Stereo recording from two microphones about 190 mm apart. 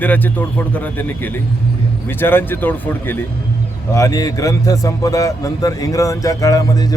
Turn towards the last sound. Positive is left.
turn(degrees=20)  # may be behind; listen again after turning